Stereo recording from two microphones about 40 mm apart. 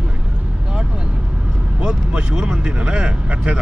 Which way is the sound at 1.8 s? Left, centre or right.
Right.